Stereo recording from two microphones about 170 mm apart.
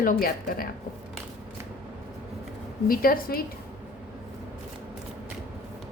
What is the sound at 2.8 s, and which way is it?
Speech, 60° left (ahead or behind).